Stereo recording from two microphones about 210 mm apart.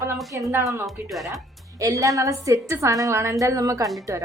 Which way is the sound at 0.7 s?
Centre (ahead or behind).